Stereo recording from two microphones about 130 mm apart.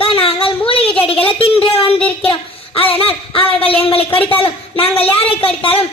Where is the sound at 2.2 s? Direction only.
45° left (ahead or behind).